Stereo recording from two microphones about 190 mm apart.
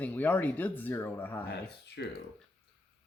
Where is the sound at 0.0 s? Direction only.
10° left (ahead or behind).